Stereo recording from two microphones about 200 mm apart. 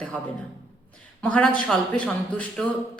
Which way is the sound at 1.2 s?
5° left (ahead or behind).